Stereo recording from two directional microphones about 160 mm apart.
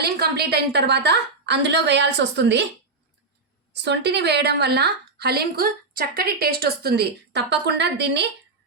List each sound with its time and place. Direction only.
0.0 s a woman's voice: 85° right
3.7 s a woman's voice: 90° right